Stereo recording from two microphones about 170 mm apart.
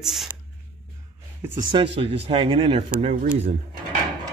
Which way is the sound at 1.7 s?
35° right (ahead or behind).